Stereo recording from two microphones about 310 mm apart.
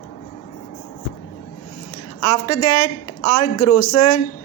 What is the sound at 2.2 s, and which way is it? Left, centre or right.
Speech, left.